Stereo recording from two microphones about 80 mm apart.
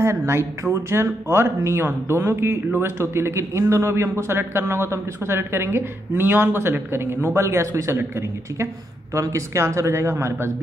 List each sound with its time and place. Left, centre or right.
0.0 s speech: right
9.1 s speech: right